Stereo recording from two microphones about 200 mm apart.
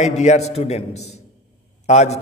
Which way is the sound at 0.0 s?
35° left (ahead or behind).